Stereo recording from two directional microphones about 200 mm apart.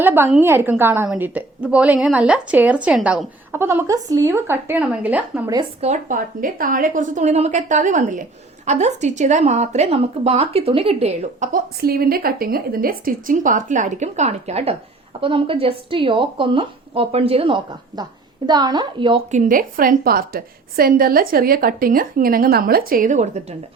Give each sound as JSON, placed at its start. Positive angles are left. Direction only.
{"t": 0.0, "sound": "a woman's voice", "side_deg": -10}
{"t": 5.8, "sound": "a woman's voice", "side_deg": -40}
{"t": 11.5, "sound": "a woman's voice", "side_deg": -50}
{"t": 19.3, "sound": "a woman's voice", "side_deg": -40}